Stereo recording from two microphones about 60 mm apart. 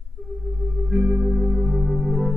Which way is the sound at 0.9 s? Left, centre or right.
Right.